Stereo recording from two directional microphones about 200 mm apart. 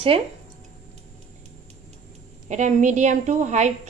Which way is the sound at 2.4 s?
40° right (ahead or behind).